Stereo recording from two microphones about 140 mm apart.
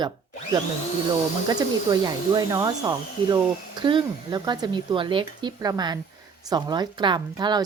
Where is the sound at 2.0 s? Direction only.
25° right (ahead or behind).